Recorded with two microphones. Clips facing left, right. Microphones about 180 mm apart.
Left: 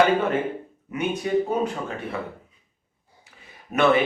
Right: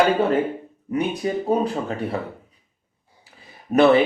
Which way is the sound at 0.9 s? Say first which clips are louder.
Right 1 dB; 35° right (ahead or behind).